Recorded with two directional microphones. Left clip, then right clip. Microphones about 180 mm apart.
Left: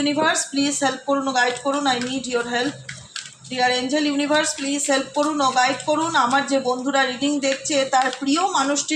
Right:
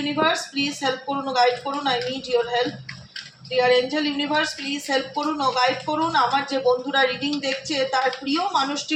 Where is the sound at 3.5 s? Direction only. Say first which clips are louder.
Right 2 dB; 30° left (ahead or behind).